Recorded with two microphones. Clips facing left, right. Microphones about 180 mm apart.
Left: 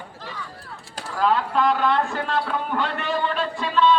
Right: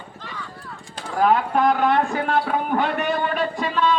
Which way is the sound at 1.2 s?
55° right (ahead or behind).